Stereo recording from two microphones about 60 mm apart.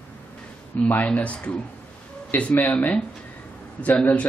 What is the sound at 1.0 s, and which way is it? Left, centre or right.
Speech, left.